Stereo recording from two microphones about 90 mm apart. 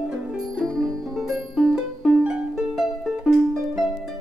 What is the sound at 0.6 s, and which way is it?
Music, 5° left (ahead or behind).